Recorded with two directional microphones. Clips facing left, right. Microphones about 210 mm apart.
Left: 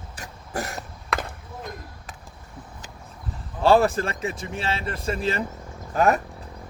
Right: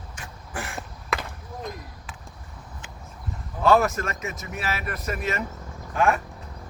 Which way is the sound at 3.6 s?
30° left (ahead or behind).